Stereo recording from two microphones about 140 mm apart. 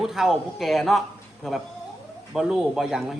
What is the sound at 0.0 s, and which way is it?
A woman's voice, 5° right (ahead or behind).